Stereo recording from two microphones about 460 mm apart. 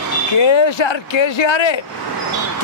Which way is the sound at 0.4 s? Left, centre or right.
Left.